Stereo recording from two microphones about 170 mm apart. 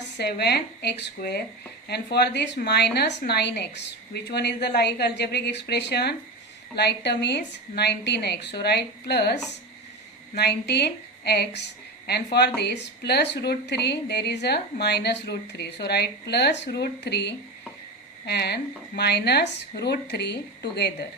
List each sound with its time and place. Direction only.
0.2 s a woman's voice: 75° left (ahead or behind)
12.5 s a woman's voice: 85° left